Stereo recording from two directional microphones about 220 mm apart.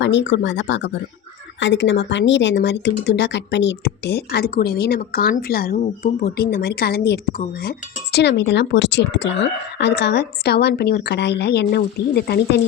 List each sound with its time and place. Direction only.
0.0 s speech: 55° left (ahead or behind)